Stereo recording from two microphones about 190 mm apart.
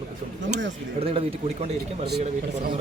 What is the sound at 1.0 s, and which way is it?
Speech, 30° right (ahead or behind).